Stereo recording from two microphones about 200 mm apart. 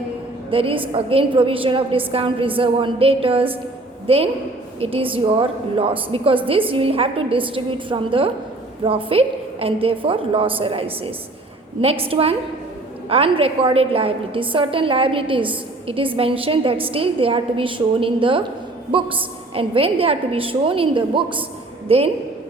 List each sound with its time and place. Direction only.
0.5 s a woman's voice: 25° right (ahead or behind)